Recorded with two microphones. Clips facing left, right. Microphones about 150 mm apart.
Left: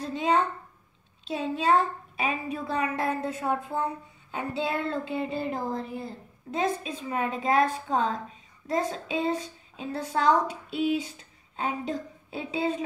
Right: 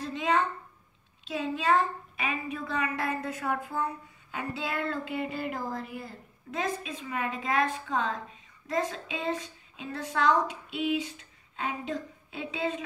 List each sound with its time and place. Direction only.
0.0 s a child's voice: 35° left (ahead or behind)